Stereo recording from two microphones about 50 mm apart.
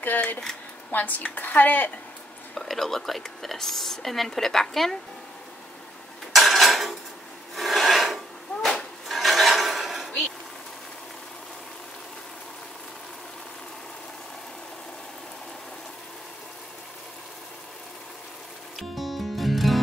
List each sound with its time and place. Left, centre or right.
0.0 s a woman's voice: left
2.5 s a woman's voice: centre
6.3 s dishes: centre
7.5 s filing: centre
8.6 s a sound: centre
18.8 s music: centre